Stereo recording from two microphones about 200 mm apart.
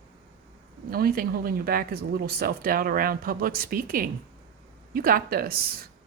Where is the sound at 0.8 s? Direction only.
45° right (ahead or behind).